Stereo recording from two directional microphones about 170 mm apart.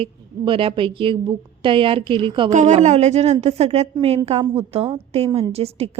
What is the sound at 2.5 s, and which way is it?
A woman's voice, 45° right (ahead or behind).